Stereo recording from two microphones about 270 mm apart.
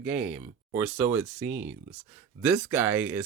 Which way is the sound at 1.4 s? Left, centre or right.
Right.